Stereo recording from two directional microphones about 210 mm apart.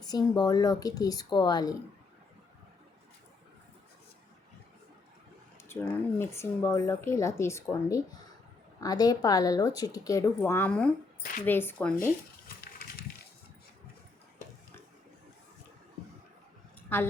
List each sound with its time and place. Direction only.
0.0 s speech: 20° left (ahead or behind)
5.6 s speech: 10° left (ahead or behind)